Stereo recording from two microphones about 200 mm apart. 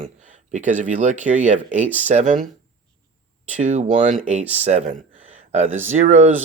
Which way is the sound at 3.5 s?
35° right (ahead or behind).